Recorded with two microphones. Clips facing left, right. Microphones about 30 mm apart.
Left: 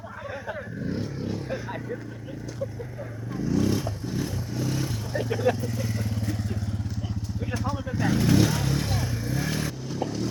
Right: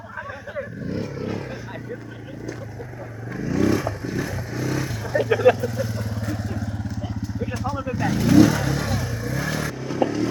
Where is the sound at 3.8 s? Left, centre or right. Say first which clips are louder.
Right 4 dB; centre.